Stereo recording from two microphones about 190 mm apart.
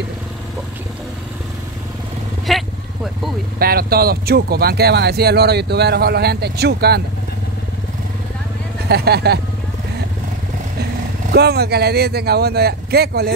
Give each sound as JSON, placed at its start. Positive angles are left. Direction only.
{"t": 2.5, "sound": "vehicle", "side_deg": 0}
{"t": 3.5, "sound": "speech", "side_deg": -50}
{"t": 8.8, "sound": "speech", "side_deg": -55}
{"t": 11.3, "sound": "speech", "side_deg": -60}